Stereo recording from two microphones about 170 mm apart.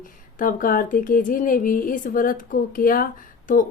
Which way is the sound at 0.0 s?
55° left (ahead or behind).